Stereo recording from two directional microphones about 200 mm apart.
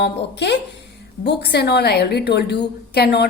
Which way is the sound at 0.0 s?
55° left (ahead or behind).